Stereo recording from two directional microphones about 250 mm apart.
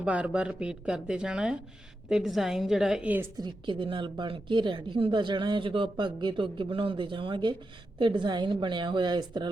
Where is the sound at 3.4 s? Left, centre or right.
Centre.